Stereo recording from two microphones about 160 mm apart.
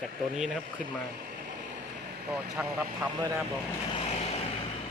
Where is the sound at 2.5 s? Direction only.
15° right (ahead or behind).